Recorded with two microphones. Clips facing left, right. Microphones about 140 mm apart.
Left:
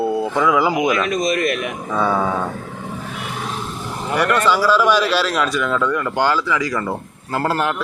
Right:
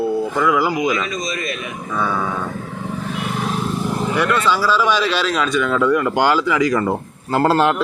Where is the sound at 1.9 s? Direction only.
30° left (ahead or behind).